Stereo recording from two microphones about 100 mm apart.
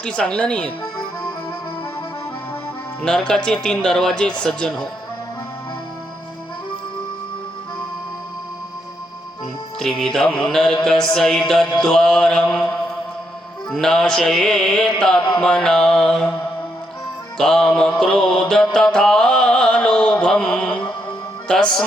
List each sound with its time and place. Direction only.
0.0 s music: 10° left (ahead or behind)
3.0 s music: 5° left (ahead or behind)
4.4 s mantra: 5° left (ahead or behind)
10.0 s mantra: 5° left (ahead or behind)
15.3 s music: 10° left (ahead or behind)
17.3 s music: 5° left (ahead or behind)
18.9 s mantra: 5° left (ahead or behind)
21.4 s speech: 10° left (ahead or behind)